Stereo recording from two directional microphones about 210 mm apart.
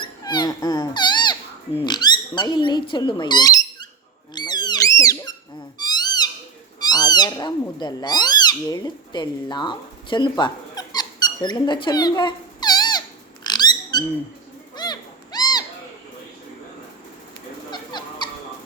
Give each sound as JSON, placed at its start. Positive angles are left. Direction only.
{"t": 0.0, "sound": "a sound", "side_deg": 20}
{"t": 4.4, "sound": "squeak", "side_deg": 20}
{"t": 5.8, "sound": "cat", "side_deg": 20}
{"t": 13.4, "sound": "music", "side_deg": 20}
{"t": 14.8, "sound": "owl", "side_deg": 20}
{"t": 17.7, "sound": "fowl", "side_deg": 20}